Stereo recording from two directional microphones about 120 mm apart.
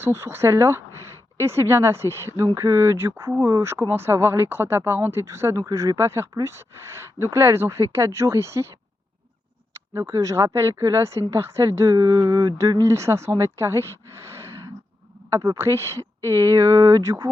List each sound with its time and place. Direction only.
0.0 s speech: 20° right (ahead or behind)